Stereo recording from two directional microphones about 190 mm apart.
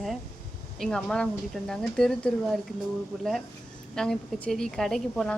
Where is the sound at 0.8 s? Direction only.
Centre (ahead or behind).